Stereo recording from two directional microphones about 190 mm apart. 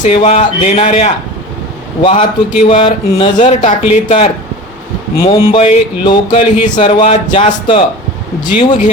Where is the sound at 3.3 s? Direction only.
40° left (ahead or behind).